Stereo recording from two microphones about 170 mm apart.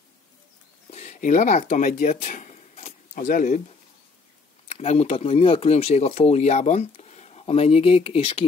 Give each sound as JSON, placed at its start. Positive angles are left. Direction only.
{"t": 0.8, "sound": "a sound", "side_deg": 40}
{"t": 3.3, "sound": "speech", "side_deg": 50}
{"t": 4.6, "sound": "speech", "side_deg": 35}